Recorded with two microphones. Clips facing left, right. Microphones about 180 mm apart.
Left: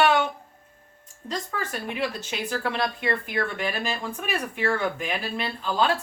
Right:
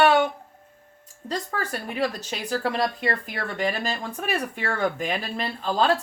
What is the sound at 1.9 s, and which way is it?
Speech, 40° right (ahead or behind).